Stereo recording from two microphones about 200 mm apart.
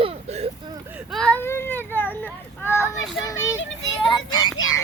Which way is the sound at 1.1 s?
5° left (ahead or behind).